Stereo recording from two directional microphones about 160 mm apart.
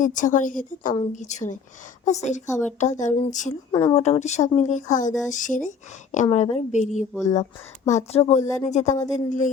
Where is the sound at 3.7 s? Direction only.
25° left (ahead or behind).